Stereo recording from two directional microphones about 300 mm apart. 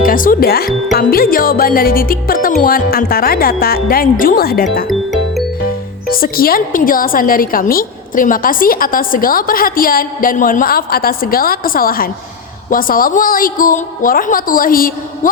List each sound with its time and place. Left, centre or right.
0.0 s a woman's voice: left
6.1 s a woman's voice: left